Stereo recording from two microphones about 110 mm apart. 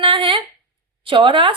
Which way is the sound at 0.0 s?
50° right (ahead or behind).